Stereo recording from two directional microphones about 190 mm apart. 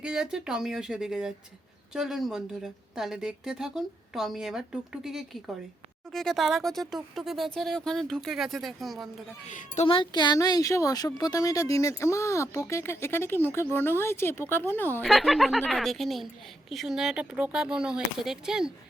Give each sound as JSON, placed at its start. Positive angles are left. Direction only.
{"t": 0.0, "sound": "a woman's voice", "side_deg": -5}
{"t": 9.5, "sound": "a child's voice", "side_deg": 40}
{"t": 9.8, "sound": "a woman's voice", "side_deg": 25}
{"t": 15.0, "sound": "a woman's voice", "side_deg": 0}